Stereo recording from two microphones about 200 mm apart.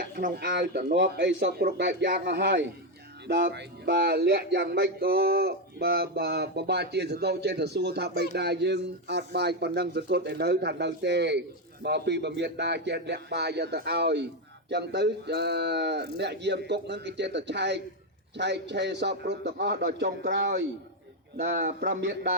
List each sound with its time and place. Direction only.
0.0 s speech: 45° right (ahead or behind); by 20.7 s 60° right (ahead or behind)
21.4 s speech: 50° right (ahead or behind)